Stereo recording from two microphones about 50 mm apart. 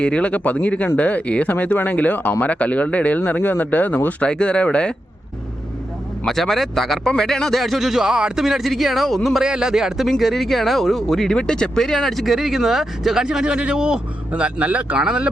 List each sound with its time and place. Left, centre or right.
0.0 s speech: left
4.2 s speech: left
6.2 s speech: centre
8.4 s speech: centre
9.4 s speech: centre
13.2 s speech: centre